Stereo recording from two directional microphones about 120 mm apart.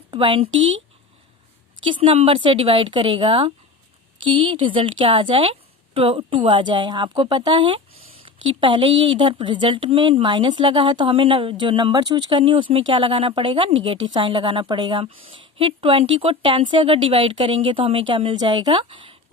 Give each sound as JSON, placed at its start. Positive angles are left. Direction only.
{"t": 0.1, "sound": "speech", "side_deg": -45}
{"t": 1.9, "sound": "a woman's voice", "side_deg": -50}
{"t": 18.8, "sound": "a woman's voice", "side_deg": -50}